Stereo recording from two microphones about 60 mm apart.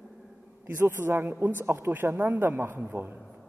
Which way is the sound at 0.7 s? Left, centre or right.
Right.